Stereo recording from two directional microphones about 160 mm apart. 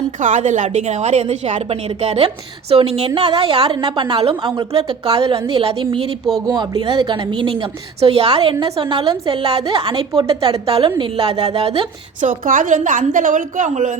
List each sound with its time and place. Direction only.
0.2 s a woman's voice: 50° right (ahead or behind)
12.3 s a woman's voice: 55° right (ahead or behind)